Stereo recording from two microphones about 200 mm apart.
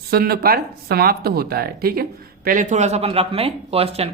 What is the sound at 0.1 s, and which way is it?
Speech, 50° right (ahead or behind).